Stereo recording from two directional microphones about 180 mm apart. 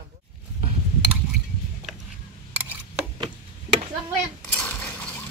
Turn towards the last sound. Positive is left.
turn(degrees=5)  # may be behind; listen again after turning